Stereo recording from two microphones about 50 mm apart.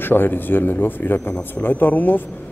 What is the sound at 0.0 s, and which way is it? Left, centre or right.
A man's voice, left.